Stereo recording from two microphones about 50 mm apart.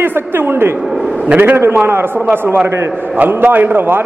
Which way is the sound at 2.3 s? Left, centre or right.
Right.